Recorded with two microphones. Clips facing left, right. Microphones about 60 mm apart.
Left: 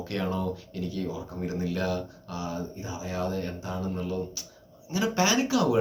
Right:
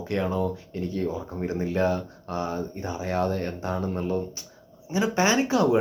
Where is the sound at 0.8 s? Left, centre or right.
Right.